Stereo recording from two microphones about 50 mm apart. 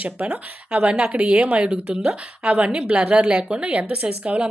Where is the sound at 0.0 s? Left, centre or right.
Right.